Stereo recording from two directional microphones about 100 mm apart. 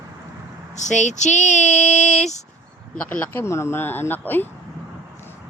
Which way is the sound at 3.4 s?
25° left (ahead or behind).